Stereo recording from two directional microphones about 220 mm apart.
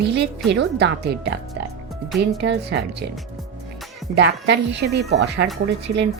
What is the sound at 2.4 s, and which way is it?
Speech, 50° right (ahead or behind).